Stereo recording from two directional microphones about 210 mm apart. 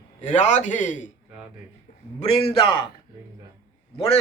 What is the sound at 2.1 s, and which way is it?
Speech, 30° left (ahead or behind).